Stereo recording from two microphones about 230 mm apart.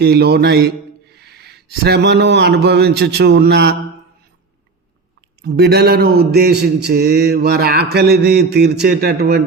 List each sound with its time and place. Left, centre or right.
0.0 s mantra: right
1.1 s speech: right
5.4 s mantra: right